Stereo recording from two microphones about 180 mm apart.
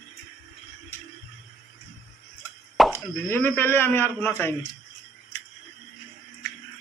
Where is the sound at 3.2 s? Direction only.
10° left (ahead or behind).